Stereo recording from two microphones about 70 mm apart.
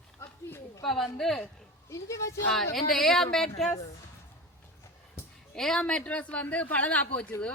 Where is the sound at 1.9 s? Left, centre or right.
Left.